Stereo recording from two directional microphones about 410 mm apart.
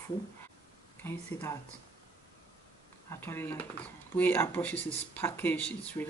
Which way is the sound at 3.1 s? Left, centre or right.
Centre.